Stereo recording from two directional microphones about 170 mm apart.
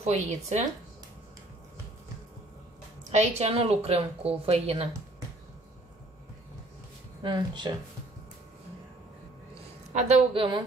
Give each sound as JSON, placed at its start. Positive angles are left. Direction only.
{"t": 0.0, "sound": "speech", "side_deg": -40}
{"t": 3.1, "sound": "speech", "side_deg": -40}
{"t": 7.2, "sound": "speech", "side_deg": -25}
{"t": 9.9, "sound": "speech", "side_deg": -40}